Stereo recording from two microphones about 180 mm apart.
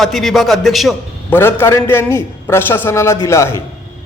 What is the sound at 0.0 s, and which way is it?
Speech, centre (ahead or behind).